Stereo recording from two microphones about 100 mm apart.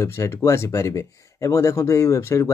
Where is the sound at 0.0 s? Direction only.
25° left (ahead or behind).